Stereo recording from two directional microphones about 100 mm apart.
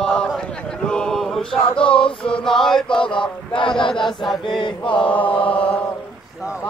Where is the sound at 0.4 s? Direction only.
10° left (ahead or behind).